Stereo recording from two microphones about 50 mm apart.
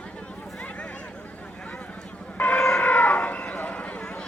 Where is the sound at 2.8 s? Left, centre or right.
Left.